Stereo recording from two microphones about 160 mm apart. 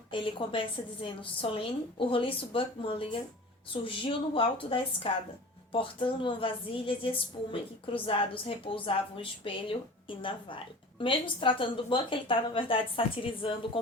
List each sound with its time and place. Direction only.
0.1 s a woman's voice: 30° left (ahead or behind)